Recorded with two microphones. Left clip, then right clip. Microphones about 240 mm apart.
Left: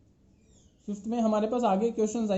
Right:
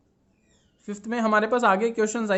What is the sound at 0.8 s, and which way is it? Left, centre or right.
Speech, right.